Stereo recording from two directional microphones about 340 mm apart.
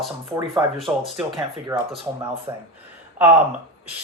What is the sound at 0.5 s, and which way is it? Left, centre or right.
Speech, centre.